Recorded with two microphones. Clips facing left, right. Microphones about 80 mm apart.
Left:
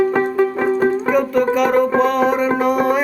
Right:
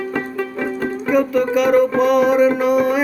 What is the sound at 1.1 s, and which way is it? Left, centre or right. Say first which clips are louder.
Music: even; centre.